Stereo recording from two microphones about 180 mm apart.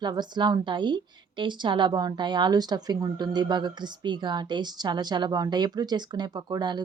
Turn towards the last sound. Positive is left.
turn(degrees=-25)  # may be behind; listen again after turning